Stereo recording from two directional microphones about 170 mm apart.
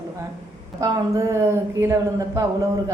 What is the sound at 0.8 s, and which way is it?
A woman's voice, 20° right (ahead or behind).